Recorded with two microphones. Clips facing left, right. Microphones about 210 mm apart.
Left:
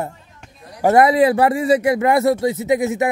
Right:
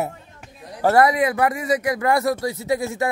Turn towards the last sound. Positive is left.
turn(degrees=20)  # may be behind; listen again after turning